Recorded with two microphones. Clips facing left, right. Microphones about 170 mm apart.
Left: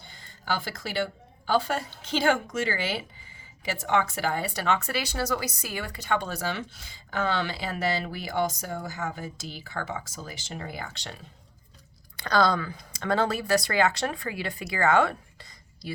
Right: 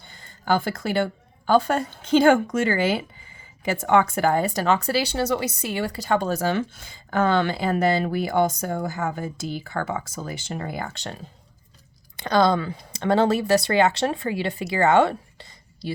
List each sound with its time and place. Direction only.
0.1 s a woman's voice: 50° right (ahead or behind)
12.1 s speech: 20° right (ahead or behind)